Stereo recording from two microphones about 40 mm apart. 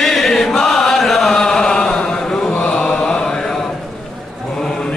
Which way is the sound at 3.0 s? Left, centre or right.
Left.